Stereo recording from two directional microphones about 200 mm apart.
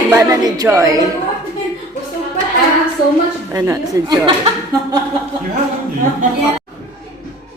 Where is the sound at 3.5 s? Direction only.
15° right (ahead or behind).